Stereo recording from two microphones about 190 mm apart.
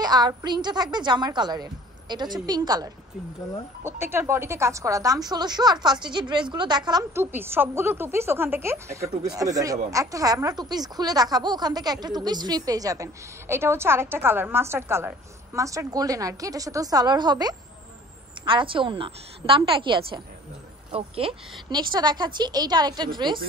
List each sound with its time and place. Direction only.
0.0 s a woman's voice: 20° right (ahead or behind)
21.6 s speech: 20° right (ahead or behind)